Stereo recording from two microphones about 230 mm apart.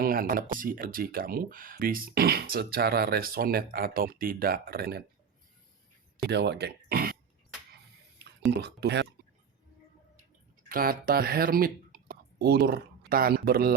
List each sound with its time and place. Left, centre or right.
0.0 s speech: right
6.2 s speech: right
8.4 s speech: right
10.7 s speech: right